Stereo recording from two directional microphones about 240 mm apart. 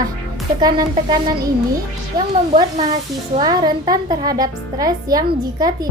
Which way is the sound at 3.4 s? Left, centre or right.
Centre.